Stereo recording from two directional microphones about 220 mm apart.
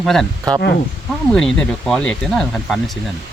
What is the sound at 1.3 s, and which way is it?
Speech, 5° left (ahead or behind).